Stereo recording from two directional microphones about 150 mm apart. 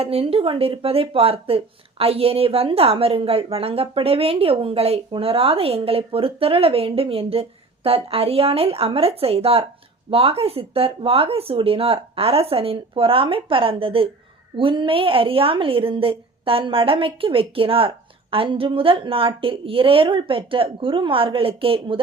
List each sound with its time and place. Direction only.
0.0 s a woman's voice: 40° right (ahead or behind)